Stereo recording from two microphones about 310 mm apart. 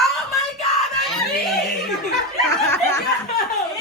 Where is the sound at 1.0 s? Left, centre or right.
Centre.